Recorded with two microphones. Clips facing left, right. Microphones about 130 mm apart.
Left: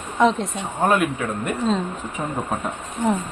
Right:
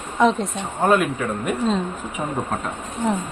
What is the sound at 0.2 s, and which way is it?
Speech, centre (ahead or behind).